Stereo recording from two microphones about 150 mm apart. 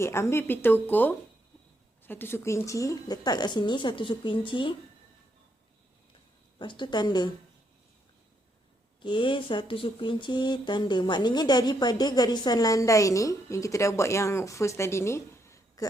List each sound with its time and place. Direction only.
0.0 s a woman's voice: 15° left (ahead or behind); by 4.7 s 35° left (ahead or behind)
6.6 s speech: 30° left (ahead or behind)
9.0 s speech: 30° left (ahead or behind)